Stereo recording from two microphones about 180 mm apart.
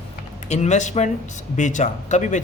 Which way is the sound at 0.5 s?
40° left (ahead or behind).